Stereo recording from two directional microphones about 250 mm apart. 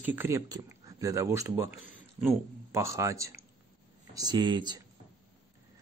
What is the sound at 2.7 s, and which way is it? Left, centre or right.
Speech, centre.